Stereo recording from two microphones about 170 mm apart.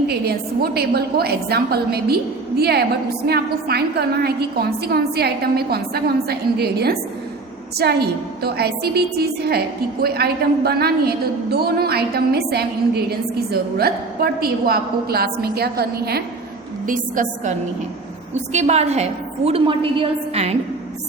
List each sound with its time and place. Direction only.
0.1 s a woman's voice: 70° right (ahead or behind)
16.8 s a woman's voice: 50° right (ahead or behind)
18.3 s a woman's voice: 40° right (ahead or behind)